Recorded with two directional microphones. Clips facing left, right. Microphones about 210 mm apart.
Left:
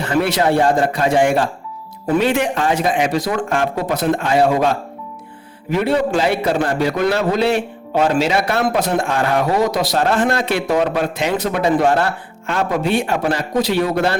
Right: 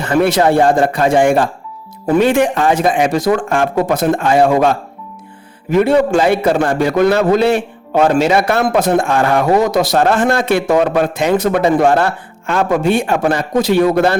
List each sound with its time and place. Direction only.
0.0 s a man's voice: 50° right (ahead or behind)
5.7 s a man's voice: 50° right (ahead or behind)